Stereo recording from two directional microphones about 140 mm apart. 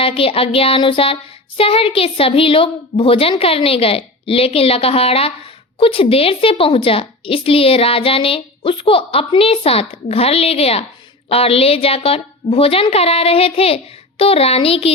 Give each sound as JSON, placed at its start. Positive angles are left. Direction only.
{"t": 0.0, "sound": "a woman's voice", "side_deg": 40}